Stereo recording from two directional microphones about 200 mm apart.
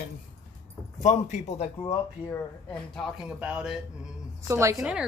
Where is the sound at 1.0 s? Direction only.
35° left (ahead or behind).